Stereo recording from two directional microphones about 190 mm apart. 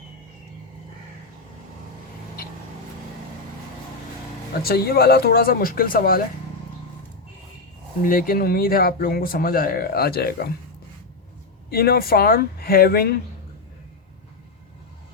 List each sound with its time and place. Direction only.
4.6 s speech: 55° left (ahead or behind)
8.0 s speech: 50° left (ahead or behind)
11.7 s speech: 55° left (ahead or behind)